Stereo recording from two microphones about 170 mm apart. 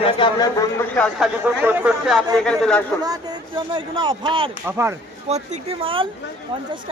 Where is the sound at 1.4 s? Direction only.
10° right (ahead or behind); by 2.8 s 5° left (ahead or behind).